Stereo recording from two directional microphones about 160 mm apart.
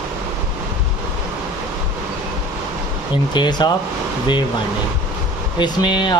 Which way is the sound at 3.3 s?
25° left (ahead or behind).